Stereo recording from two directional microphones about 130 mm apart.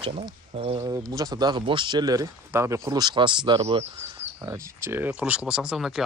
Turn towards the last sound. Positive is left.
turn(degrees=-5)  # may be behind; listen again after turning